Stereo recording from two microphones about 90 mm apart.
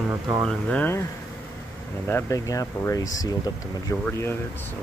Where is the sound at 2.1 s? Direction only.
30° left (ahead or behind).